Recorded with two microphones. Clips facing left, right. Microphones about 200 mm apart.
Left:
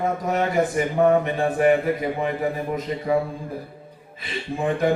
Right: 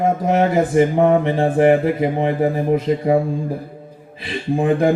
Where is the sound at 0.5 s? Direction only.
25° right (ahead or behind).